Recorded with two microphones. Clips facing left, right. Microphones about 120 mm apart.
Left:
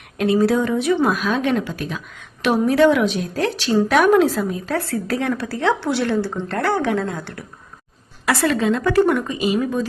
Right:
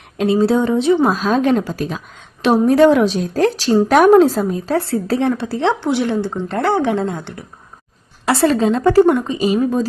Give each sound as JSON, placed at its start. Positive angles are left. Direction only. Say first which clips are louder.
{"t": 0.2, "sound": "a woman's voice", "louder": "right 2 dB", "side_deg": -25}
{"t": 9.4, "sound": "a woman's voice", "louder": "right 4 dB", "side_deg": -35}